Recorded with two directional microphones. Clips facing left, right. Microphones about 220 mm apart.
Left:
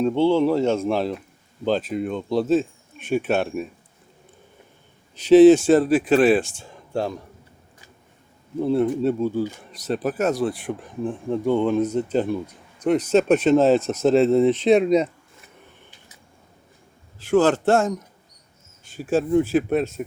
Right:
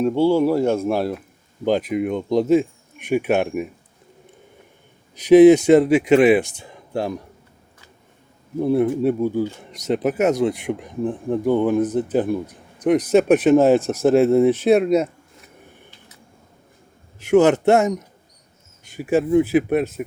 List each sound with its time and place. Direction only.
0.0 s speech: 10° right (ahead or behind)
5.3 s speech: 15° right (ahead or behind)
8.6 s speech: 15° right (ahead or behind)
17.2 s a man's voice: 20° right (ahead or behind)
18.9 s speech: 10° right (ahead or behind)